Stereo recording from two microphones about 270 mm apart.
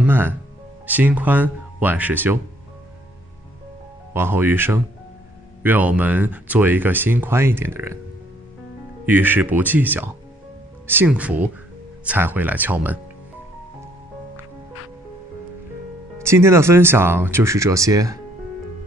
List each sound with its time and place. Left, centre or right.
0.0 s speech: centre
4.1 s speech: centre
9.0 s speech: centre
16.2 s speech: centre